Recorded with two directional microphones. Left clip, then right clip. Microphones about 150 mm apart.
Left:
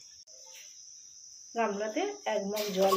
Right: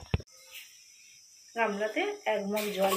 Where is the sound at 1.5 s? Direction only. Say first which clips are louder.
Right 2 dB; 90° left.